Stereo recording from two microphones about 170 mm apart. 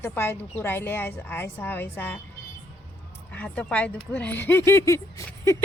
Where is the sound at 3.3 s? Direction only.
10° left (ahead or behind).